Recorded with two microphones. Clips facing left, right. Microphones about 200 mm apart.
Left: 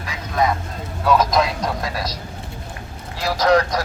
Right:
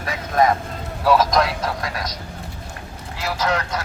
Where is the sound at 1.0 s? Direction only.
5° right (ahead or behind).